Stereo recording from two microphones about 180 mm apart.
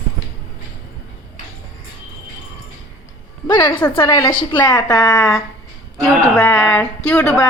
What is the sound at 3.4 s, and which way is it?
A woman's voice, 15° left (ahead or behind).